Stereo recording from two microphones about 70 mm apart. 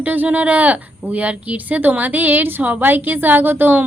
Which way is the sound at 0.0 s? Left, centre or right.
Right.